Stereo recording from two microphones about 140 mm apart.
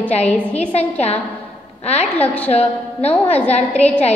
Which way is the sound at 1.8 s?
50° left (ahead or behind).